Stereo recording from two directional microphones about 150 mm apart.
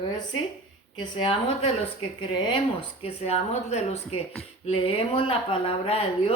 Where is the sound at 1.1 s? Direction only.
35° left (ahead or behind).